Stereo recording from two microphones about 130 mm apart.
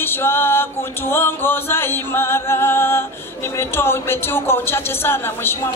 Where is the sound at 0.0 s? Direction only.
15° left (ahead or behind).